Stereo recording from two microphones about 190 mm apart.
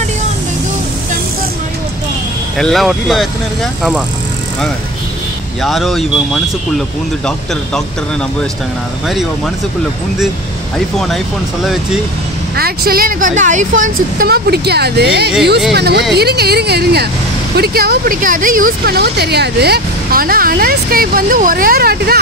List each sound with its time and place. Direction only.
2.5 s speech: centre (ahead or behind)
5.6 s speech: centre (ahead or behind)
12.5 s speech: 55° right (ahead or behind)